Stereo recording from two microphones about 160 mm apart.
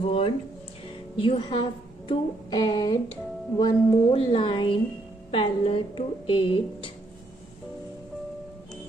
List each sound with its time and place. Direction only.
0.0 s a woman's voice: 35° left (ahead or behind)